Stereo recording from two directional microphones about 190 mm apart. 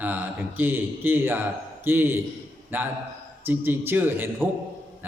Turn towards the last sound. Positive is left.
turn(degrees=-10)  # may be behind; listen again after turning